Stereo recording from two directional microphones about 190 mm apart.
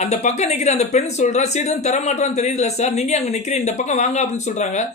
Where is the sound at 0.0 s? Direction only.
35° left (ahead or behind).